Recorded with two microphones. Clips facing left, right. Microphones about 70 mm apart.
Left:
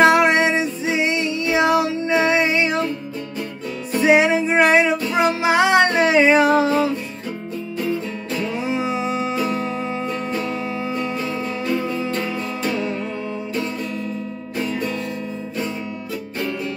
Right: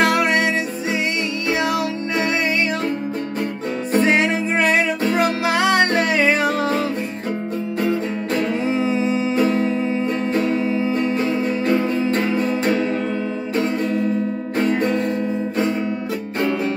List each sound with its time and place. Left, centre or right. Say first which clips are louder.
0.0 s music: left 3 dB; left
4.0 s music: left 5 dB; centre
8.6 s music: right 3 dB; centre
11.6 s music: right 3 dB; right
14.6 s music: right 5 dB; right
16.3 s music: right 5 dB; right